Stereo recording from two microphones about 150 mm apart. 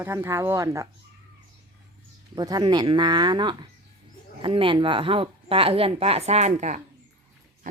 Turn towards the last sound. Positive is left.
turn(degrees=-50)  # may be behind; listen again after turning